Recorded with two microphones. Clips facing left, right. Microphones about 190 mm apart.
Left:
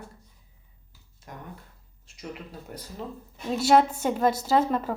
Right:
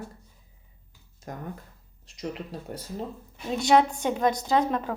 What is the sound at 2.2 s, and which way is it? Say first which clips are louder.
Speech: right 5 dB; 35° right (ahead or behind).